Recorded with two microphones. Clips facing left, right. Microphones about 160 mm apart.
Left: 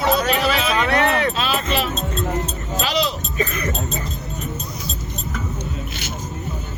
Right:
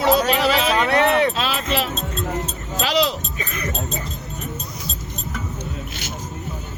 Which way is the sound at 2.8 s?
90° right.